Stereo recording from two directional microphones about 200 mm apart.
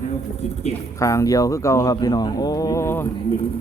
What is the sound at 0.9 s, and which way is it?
Speech, 15° left (ahead or behind).